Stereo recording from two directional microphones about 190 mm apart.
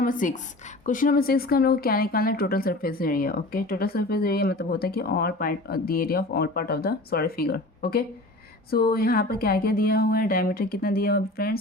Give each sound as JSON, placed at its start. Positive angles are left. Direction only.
{"t": 0.0, "sound": "speech", "side_deg": 45}